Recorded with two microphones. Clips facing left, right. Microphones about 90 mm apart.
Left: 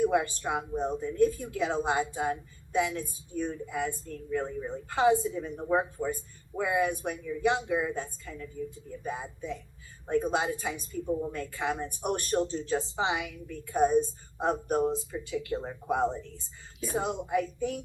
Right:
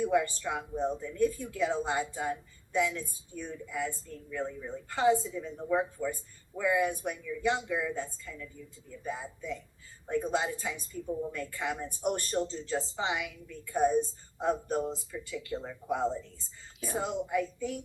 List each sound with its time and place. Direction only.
0.0 s speech: 60° left (ahead or behind)
9.1 s speech: 60° left (ahead or behind)